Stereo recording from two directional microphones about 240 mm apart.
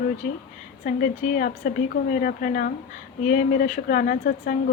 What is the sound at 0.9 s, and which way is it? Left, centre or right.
Speech, left.